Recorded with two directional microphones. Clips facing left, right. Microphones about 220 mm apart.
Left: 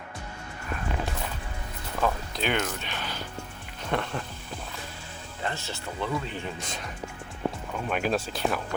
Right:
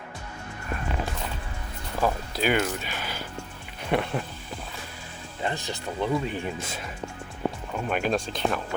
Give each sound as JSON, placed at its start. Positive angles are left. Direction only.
{"t": 2.0, "sound": "speech", "side_deg": -10}
{"t": 5.4, "sound": "speech", "side_deg": -15}
{"t": 7.9, "sound": "speech", "side_deg": 0}